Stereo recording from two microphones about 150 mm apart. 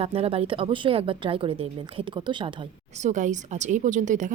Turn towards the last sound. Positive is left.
turn(degrees=-55)  # may be behind; listen again after turning